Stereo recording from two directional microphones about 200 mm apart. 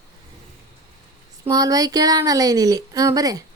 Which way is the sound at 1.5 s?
20° right (ahead or behind).